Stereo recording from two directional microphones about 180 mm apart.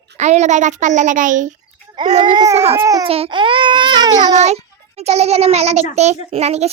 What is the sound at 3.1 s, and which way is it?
Speech, 30° right (ahead or behind).